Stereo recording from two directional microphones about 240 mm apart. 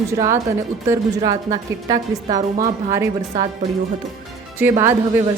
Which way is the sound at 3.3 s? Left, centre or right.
Right.